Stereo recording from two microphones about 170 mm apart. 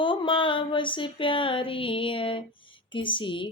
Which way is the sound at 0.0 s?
30° left (ahead or behind).